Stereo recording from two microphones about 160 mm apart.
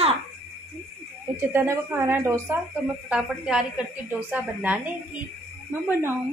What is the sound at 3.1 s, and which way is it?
A woman's voice, 5° right (ahead or behind).